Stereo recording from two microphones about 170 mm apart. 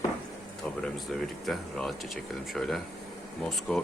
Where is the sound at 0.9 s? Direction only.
Centre (ahead or behind).